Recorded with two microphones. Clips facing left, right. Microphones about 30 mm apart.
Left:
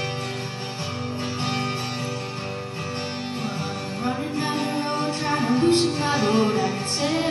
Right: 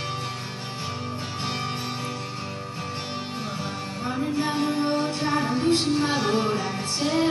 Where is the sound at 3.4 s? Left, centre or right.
Left.